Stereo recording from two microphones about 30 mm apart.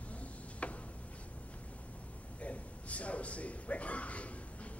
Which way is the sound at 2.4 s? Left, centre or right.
Left.